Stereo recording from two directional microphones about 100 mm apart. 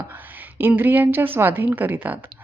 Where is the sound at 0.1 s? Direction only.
20° right (ahead or behind).